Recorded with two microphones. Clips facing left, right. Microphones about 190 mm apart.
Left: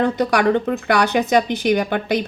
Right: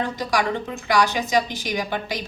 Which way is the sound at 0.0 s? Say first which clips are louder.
Left 7 dB; 60° left (ahead or behind).